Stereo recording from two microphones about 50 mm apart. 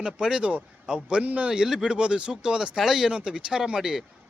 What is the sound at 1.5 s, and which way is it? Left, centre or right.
Speech, centre.